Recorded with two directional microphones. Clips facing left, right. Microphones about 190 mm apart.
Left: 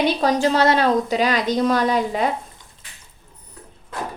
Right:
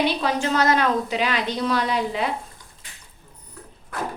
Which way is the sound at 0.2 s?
35° left (ahead or behind).